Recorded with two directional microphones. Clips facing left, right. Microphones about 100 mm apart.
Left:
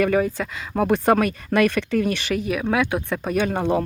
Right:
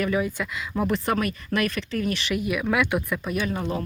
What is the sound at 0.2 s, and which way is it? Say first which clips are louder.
Speech: left 4 dB; 35° left (ahead or behind).